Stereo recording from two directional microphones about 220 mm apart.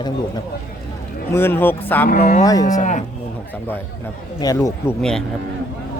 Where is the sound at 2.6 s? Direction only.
35° left (ahead or behind).